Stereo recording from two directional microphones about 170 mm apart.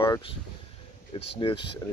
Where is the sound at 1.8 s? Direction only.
20° left (ahead or behind).